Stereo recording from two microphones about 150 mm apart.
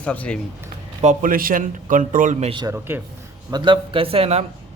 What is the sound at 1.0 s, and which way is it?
Speech, 60° right (ahead or behind).